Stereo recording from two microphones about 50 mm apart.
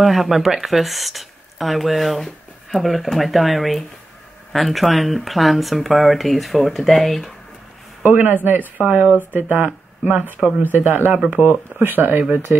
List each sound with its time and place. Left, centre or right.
0.0 s speech: centre
8.0 s speech: right
11.2 s speech: right
11.8 s speech: right